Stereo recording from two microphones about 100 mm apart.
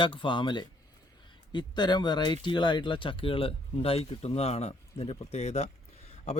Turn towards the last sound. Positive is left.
turn(degrees=90)